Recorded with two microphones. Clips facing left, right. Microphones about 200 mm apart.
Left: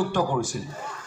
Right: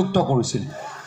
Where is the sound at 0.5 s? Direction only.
50° right (ahead or behind).